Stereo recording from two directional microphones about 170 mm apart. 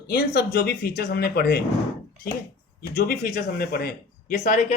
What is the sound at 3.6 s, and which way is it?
Speech, 60° left (ahead or behind).